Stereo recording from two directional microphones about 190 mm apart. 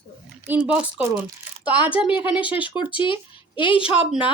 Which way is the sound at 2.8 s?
25° left (ahead or behind).